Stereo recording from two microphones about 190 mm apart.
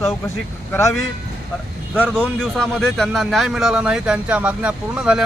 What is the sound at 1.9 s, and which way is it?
A man's voice, 5° left (ahead or behind).